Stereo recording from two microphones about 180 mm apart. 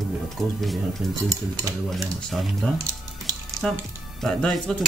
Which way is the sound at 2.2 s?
Centre (ahead or behind).